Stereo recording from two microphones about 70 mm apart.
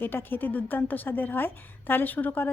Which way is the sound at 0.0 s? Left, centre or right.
Left.